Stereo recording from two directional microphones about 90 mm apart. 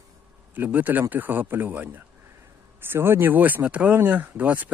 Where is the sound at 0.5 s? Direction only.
20° right (ahead or behind).